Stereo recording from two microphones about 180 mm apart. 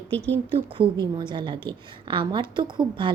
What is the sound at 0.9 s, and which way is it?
A woman's voice, 25° right (ahead or behind).